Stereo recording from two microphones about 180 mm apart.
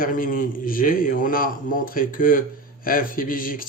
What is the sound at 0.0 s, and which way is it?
Speech, 50° left (ahead or behind).